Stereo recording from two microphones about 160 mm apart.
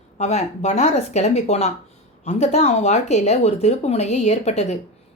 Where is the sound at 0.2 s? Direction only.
45° left (ahead or behind).